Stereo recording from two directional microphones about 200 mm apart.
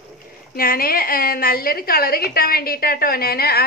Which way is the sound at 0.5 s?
45° left (ahead or behind).